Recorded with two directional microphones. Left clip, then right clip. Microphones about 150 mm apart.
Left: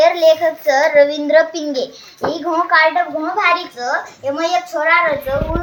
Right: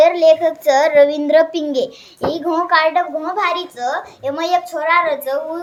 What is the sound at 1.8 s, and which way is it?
A child's voice, 30° right (ahead or behind).